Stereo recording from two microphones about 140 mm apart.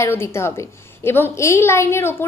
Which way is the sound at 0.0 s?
20° left (ahead or behind).